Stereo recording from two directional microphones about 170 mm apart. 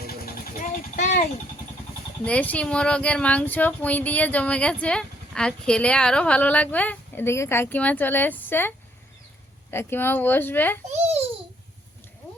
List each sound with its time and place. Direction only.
0.6 s a sound: 45° left (ahead or behind)
2.2 s speech: 10° left (ahead or behind)
9.7 s speech: 10° left (ahead or behind)
10.9 s babbling: 40° right (ahead or behind)